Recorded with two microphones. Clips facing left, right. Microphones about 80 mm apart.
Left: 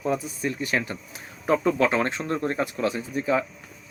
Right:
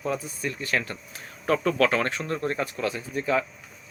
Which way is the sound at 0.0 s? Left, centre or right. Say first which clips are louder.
Left 3 dB; centre.